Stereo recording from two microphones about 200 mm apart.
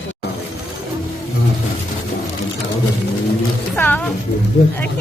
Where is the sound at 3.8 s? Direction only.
10° left (ahead or behind).